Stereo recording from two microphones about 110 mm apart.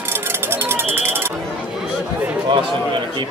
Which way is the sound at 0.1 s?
20° right (ahead or behind).